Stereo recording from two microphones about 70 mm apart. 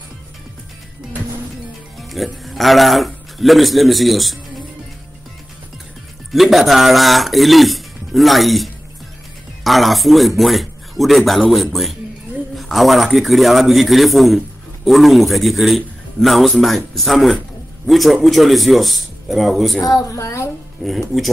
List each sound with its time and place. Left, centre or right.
2.0 s speech: centre
6.3 s a man's voice: centre
19.8 s a woman's voice: left
20.8 s a man's voice: centre